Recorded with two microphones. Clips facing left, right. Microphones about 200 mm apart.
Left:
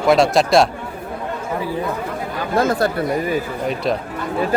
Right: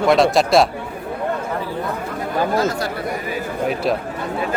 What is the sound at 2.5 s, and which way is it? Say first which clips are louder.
Speech: left 8 dB; 55° left (ahead or behind).